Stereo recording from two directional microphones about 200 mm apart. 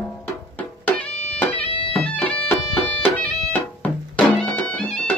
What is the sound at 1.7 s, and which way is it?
Music, 30° left (ahead or behind).